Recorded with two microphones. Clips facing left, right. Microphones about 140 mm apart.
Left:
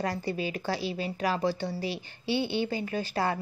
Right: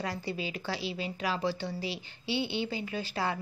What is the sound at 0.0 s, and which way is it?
A woman's voice, 45° left (ahead or behind).